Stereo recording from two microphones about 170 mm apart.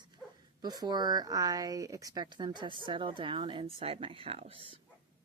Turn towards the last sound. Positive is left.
turn(degrees=-30)  # may be behind; listen again after turning